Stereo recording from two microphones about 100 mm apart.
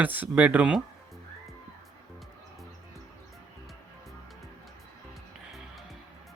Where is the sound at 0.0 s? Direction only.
15° right (ahead or behind).